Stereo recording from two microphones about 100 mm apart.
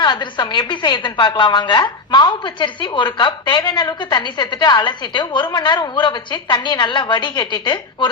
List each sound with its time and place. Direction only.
0.0 s a woman's voice: 45° left (ahead or behind)